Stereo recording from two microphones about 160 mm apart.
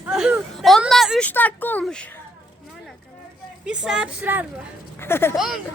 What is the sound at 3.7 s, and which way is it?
Speech, 5° right (ahead or behind).